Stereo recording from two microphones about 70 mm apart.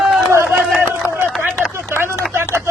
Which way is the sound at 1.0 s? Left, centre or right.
Right.